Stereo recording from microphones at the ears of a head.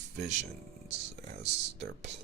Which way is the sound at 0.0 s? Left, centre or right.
Right.